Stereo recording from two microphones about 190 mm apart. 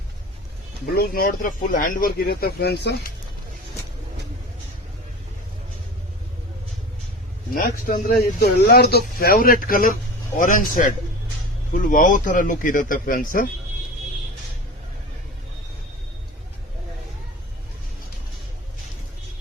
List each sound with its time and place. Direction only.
0.9 s speech: 50° left (ahead or behind)
7.5 s speech: 45° left (ahead or behind)